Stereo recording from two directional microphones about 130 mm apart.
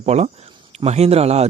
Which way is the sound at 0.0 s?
60° right (ahead or behind).